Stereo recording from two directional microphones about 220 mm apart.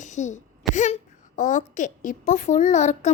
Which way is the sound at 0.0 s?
35° left (ahead or behind).